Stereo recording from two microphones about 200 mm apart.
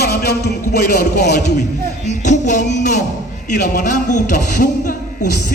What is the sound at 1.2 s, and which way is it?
Speech, 35° left (ahead or behind).